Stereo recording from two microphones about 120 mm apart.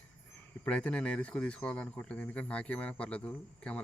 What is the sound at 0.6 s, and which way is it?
Speech, 10° left (ahead or behind).